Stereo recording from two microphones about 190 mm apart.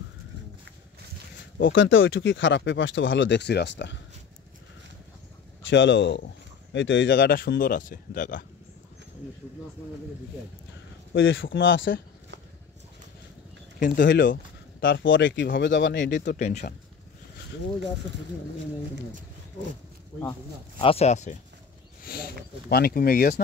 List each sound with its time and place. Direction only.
1.6 s speech: 90° left; by 4.0 s 70° left (ahead or behind)
5.7 s speech: 70° left (ahead or behind)
7.2 s speech: 50° left (ahead or behind)
11.1 s speech: 85° left
13.7 s speech: 50° left (ahead or behind)
14.0 s speech: 75° left (ahead or behind)
16.3 s speech: 35° left (ahead or behind)
20.8 s speech: 35° left (ahead or behind)
22.0 s speech: 55° left (ahead or behind)